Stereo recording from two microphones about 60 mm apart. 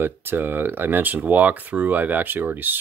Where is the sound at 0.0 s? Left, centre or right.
Right.